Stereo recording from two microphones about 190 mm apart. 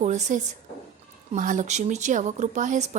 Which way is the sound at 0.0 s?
40° right (ahead or behind).